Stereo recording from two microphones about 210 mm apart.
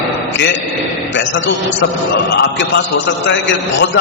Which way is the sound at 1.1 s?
60° left (ahead or behind).